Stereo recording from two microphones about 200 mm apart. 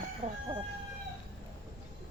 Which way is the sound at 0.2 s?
45° right (ahead or behind).